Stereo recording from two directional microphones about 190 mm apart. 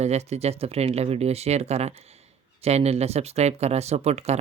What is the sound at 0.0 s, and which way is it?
Speech, 35° right (ahead or behind).